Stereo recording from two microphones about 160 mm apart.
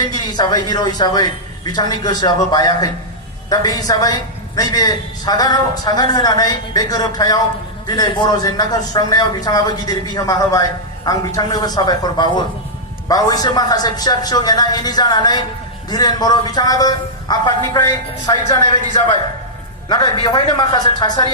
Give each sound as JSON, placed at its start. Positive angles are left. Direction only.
{"t": 0.0, "sound": "a man's voice", "side_deg": 25}
{"t": 19.9, "sound": "a man's voice", "side_deg": 25}